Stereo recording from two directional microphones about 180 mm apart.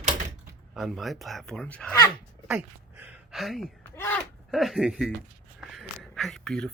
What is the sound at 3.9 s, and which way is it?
Speech, 10° left (ahead or behind).